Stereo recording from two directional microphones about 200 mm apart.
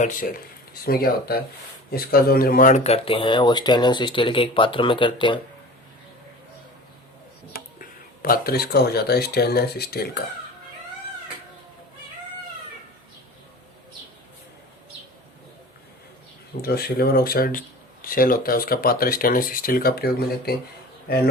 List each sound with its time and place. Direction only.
0.0 s speech: 45° left (ahead or behind); by 5.4 s 25° left (ahead or behind)
7.5 s speech: 45° left (ahead or behind)
16.6 s speech: 50° left (ahead or behind)